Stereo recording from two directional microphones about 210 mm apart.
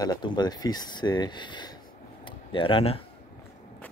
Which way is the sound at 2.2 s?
25° left (ahead or behind).